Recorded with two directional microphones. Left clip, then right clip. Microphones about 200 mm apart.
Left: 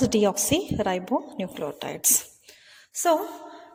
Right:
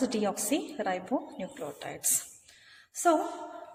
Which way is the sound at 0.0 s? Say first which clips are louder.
Left 8 dB; 35° left (ahead or behind).